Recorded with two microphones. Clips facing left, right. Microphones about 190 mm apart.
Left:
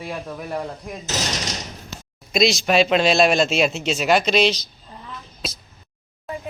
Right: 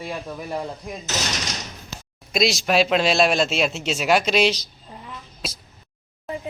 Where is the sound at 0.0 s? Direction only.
Centre (ahead or behind).